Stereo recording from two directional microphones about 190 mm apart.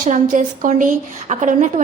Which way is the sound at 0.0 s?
40° right (ahead or behind).